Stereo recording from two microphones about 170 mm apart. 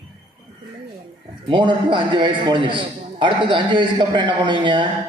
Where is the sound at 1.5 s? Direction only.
30° right (ahead or behind).